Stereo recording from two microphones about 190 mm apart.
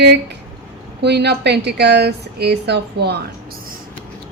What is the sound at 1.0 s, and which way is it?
Speech, 60° right (ahead or behind).